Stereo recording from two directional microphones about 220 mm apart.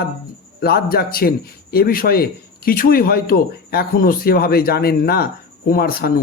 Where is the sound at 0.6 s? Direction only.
45° left (ahead or behind).